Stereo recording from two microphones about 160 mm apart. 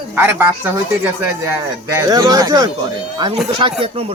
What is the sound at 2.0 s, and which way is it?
Speech, 25° right (ahead or behind).